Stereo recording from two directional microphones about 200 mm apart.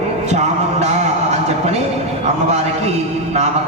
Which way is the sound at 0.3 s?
35° right (ahead or behind).